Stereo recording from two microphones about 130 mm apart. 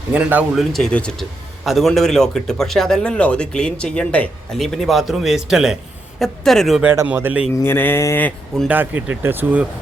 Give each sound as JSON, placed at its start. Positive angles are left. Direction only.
{"t": 0.1, "sound": "speech", "side_deg": -10}
{"t": 0.6, "sound": "speech", "side_deg": 5}
{"t": 6.8, "sound": "speech", "side_deg": -20}
{"t": 7.6, "sound": "speech", "side_deg": 15}
{"t": 8.6, "sound": "speech", "side_deg": -15}